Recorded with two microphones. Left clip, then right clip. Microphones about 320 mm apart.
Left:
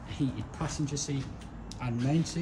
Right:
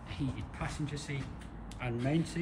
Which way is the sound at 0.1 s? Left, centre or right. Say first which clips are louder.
Left 6 dB; centre.